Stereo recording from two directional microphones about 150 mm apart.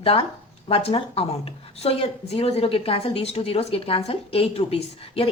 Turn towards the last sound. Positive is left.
turn(degrees=40)  # may be behind; listen again after turning